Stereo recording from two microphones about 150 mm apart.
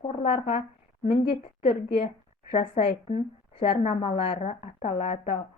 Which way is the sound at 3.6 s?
45° left (ahead or behind).